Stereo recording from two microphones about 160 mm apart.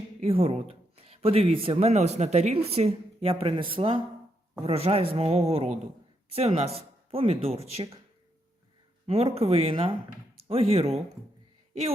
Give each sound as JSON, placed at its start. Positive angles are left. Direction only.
{"t": 0.2, "sound": "a woman's voice", "side_deg": -35}
{"t": 9.0, "sound": "a woman's voice", "side_deg": -40}